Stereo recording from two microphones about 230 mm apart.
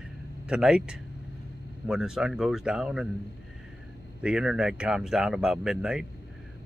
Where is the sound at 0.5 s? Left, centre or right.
Centre.